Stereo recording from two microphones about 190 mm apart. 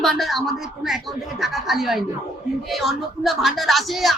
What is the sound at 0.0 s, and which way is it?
Speech, centre (ahead or behind).